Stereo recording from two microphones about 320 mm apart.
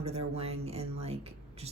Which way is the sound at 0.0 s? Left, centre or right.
Centre.